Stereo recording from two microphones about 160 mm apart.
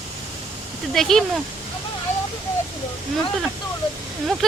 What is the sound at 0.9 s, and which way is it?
Speech, centre (ahead or behind).